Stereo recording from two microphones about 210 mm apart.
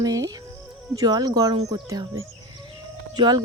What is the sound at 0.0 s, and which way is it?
Speech, 15° right (ahead or behind).